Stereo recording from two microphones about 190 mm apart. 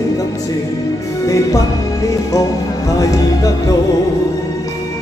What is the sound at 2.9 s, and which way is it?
Speech, 15° left (ahead or behind).